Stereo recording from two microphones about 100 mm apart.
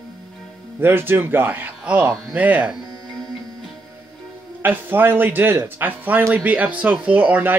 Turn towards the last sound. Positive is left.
turn(degrees=-15)  # may be behind; listen again after turning